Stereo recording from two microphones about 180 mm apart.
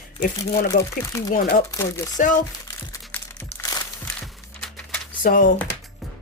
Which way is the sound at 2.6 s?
15° left (ahead or behind).